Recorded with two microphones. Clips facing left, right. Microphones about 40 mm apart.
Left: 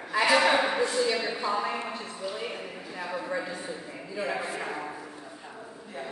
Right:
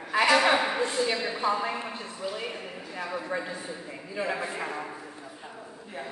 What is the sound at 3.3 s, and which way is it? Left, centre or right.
A man's voice, right.